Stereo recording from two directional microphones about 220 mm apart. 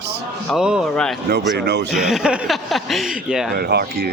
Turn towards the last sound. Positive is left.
turn(degrees=-45)  # may be behind; listen again after turning